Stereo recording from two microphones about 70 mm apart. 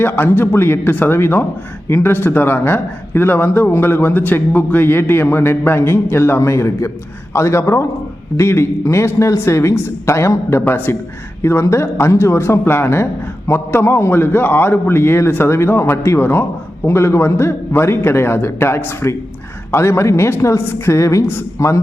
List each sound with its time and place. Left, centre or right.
0.0 s a man's voice: left
10.7 s speech: left
11.4 s a man's voice: left